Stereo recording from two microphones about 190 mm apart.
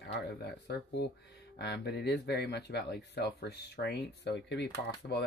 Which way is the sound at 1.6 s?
60° left (ahead or behind).